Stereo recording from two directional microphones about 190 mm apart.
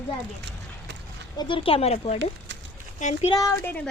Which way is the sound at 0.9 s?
65° right (ahead or behind).